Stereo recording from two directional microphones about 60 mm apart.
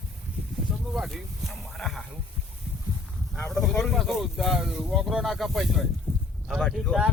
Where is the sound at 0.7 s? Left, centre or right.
Centre.